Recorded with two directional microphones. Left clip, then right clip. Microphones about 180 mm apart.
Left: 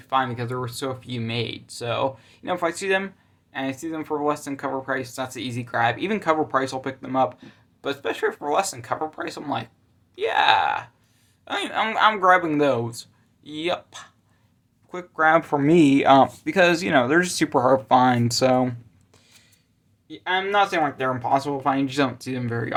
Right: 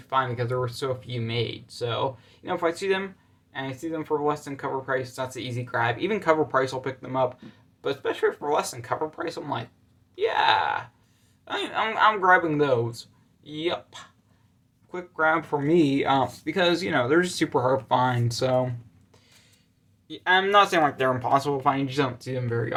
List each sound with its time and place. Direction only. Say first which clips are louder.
0.1 s speech: left 2 dB; 25° left (ahead or behind)
20.1 s speech: right 3 dB; 5° right (ahead or behind)
21.8 s speech: left 3 dB; 20° left (ahead or behind)